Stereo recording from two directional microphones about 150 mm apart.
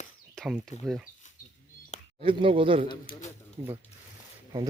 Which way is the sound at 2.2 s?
35° right (ahead or behind).